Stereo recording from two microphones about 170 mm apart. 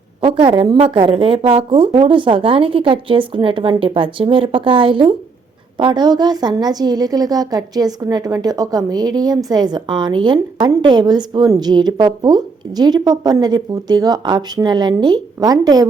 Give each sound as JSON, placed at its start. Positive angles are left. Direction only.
{"t": 0.4, "sound": "a woman's voice", "side_deg": -30}